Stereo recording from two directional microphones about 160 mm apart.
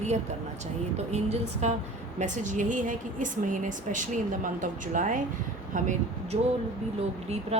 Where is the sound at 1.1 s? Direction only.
45° right (ahead or behind).